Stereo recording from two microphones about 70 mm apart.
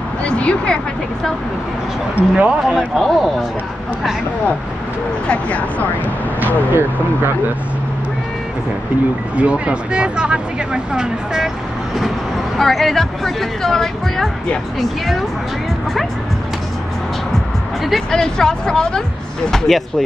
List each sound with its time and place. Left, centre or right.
0.2 s speech: centre
2.1 s speech: centre
2.6 s speech: centre
5.3 s speech: centre
9.4 s speech: centre
12.5 s speech: centre
17.8 s speech: centre